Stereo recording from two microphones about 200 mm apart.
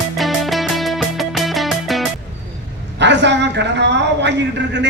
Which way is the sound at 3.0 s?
60° right (ahead or behind).